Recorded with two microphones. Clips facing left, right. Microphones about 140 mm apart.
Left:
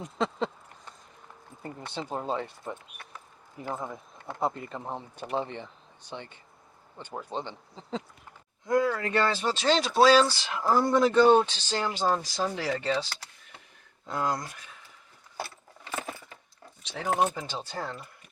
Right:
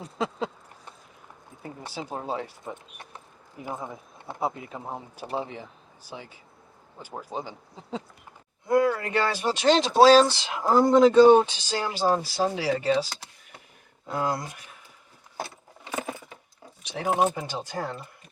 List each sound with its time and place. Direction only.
0.2 s a sound: 5° right (ahead or behind)
1.8 s speech: 10° right (ahead or behind)
15.4 s keys jangling: 15° right (ahead or behind)
16.8 s speech: 10° right (ahead or behind)